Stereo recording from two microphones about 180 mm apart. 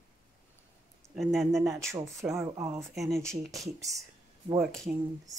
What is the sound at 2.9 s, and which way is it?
Speech, centre (ahead or behind).